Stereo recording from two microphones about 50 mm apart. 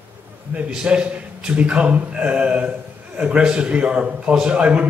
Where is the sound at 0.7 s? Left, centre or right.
Centre.